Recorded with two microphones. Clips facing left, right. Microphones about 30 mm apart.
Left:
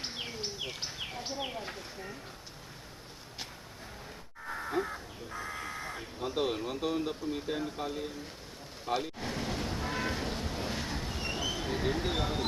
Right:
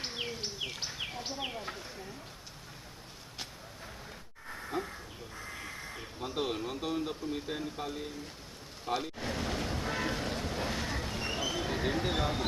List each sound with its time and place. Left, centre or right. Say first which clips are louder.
1.5 s a sound: even; centre
4.7 s crow: left 3 dB; centre
5.5 s crow: left 3 dB; left
6.1 s speech: left 2 dB; centre
8.9 s vehicle: left 1 dB; centre